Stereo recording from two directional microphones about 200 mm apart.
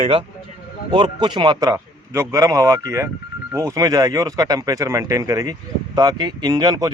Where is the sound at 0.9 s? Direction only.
20° right (ahead or behind).